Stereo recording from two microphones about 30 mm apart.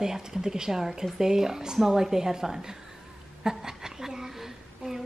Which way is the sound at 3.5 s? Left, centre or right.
Centre.